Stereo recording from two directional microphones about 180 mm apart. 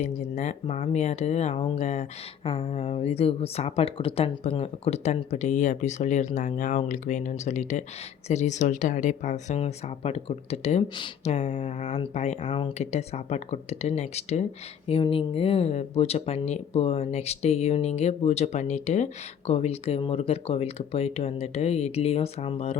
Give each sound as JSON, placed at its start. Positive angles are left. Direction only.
{"t": 0.0, "sound": "speech", "side_deg": 40}